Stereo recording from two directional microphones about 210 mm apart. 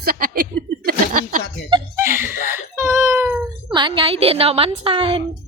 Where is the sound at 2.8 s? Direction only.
15° right (ahead or behind).